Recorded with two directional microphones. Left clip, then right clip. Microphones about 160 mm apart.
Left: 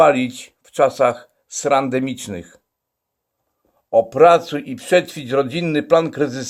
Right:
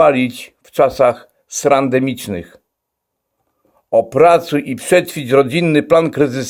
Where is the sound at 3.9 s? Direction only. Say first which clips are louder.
Right 2 dB; 45° right (ahead or behind).